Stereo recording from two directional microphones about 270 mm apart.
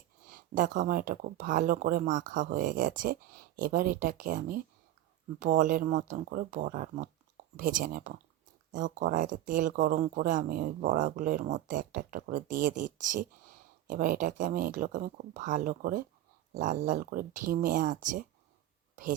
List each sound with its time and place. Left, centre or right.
0.3 s speech: right